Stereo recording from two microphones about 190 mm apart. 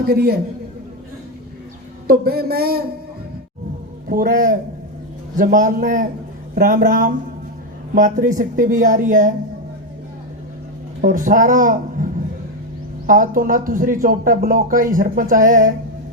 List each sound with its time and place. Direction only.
0.0 s a man's voice: 55° right (ahead or behind)
2.0 s speech: 55° right (ahead or behind)
4.1 s speech: 45° right (ahead or behind)
11.0 s a woman's voice: 45° right (ahead or behind)